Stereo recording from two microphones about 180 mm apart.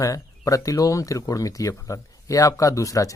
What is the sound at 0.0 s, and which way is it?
A man's voice, 20° left (ahead or behind).